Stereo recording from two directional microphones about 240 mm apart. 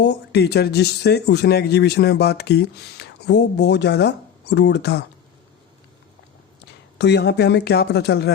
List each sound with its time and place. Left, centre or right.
0.0 s speech: left
7.0 s speech: left